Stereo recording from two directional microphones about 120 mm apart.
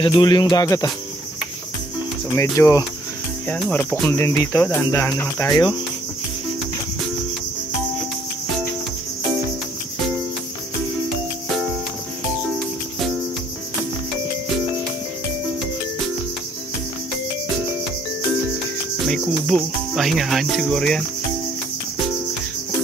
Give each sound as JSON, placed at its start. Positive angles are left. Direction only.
{"t": 0.0, "sound": "music", "side_deg": 40}
{"t": 2.3, "sound": "speech", "side_deg": 25}
{"t": 3.4, "sound": "speech", "side_deg": 10}
{"t": 4.2, "sound": "speech", "side_deg": 20}
{"t": 19.0, "sound": "cricket", "side_deg": 5}